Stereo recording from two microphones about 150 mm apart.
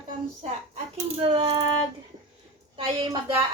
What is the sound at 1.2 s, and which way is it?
Speech, 35° right (ahead or behind).